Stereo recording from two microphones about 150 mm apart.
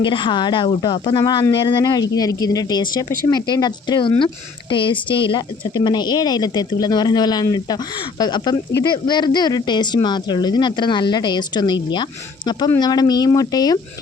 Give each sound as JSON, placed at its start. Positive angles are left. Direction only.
{"t": 0.0, "sound": "speech", "side_deg": 35}